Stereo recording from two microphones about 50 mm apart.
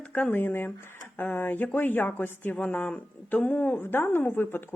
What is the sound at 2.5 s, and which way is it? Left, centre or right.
Speech, left.